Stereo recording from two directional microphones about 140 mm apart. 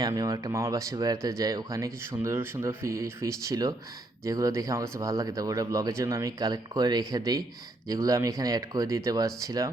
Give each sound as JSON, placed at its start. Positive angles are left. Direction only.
{"t": 0.0, "sound": "speech", "side_deg": -25}